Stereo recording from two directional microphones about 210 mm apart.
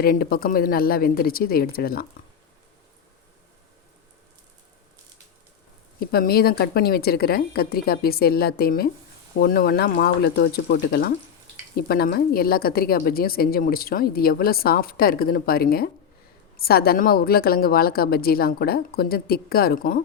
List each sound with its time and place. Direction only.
0.0 s a woman's voice: 45° left (ahead or behind)
6.0 s a woman's voice: 45° left (ahead or behind)